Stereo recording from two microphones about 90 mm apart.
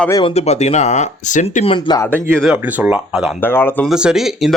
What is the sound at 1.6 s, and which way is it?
Speech, 65° left (ahead or behind).